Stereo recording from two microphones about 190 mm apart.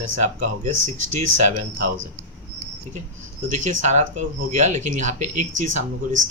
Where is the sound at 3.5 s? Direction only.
40° right (ahead or behind).